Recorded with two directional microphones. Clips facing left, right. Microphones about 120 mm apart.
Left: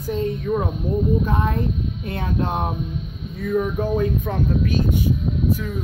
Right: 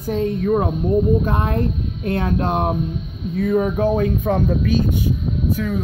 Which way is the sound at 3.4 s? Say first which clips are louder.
Right 4 dB; 85° right.